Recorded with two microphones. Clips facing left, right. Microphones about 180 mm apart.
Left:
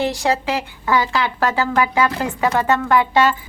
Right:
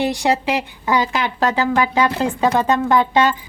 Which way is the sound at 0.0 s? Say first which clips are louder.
Right 1 dB; 15° right (ahead or behind).